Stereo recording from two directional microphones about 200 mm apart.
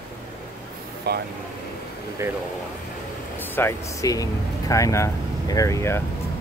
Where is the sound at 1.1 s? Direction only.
50° right (ahead or behind).